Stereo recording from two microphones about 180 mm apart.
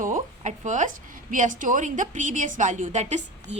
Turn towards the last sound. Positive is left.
turn(degrees=-40)  # may be behind; listen again after turning